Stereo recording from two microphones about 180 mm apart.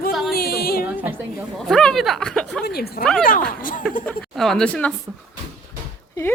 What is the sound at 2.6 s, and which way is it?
Speech, 60° left (ahead or behind).